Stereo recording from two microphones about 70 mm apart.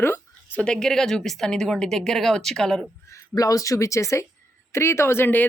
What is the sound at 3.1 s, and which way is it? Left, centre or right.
A woman's voice, left.